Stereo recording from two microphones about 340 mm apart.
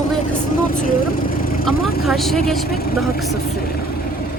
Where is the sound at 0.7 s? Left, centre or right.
Left.